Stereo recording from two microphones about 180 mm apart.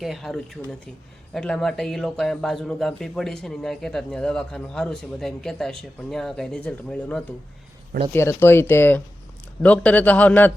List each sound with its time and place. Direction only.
0.0 s speech: centre (ahead or behind)